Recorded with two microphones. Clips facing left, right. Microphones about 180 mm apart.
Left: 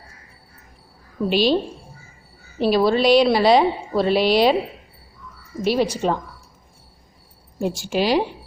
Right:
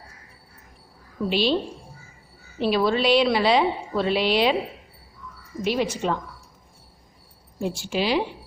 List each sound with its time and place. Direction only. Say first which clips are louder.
1.3 s a woman's voice: left 4 dB; 40° left (ahead or behind)
2.6 s a woman's voice: left 4 dB; 40° left (ahead or behind)
5.6 s a woman's voice: left 4 dB; 35° left (ahead or behind)
7.6 s speech: left 4 dB; 45° left (ahead or behind)